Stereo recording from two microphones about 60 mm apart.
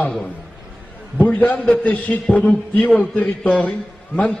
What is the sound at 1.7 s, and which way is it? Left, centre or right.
A man's voice, left.